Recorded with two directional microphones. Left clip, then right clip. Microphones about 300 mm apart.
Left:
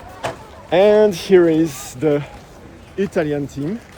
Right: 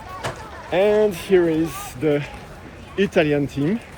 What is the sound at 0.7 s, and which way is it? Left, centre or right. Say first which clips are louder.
Speech: left 5 dB; left.